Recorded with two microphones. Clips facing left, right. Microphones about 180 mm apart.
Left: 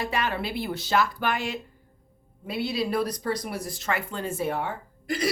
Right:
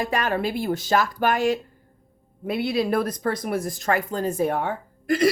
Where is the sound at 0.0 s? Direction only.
45° right (ahead or behind).